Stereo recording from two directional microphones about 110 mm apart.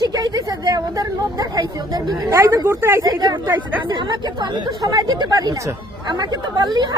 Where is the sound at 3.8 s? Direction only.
45° right (ahead or behind).